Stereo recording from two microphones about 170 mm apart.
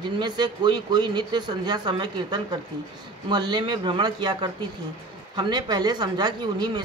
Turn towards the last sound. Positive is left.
turn(degrees=-25)  # may be behind; listen again after turning